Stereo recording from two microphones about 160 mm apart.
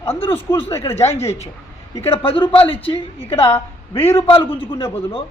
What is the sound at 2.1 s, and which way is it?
Speech, 35° left (ahead or behind).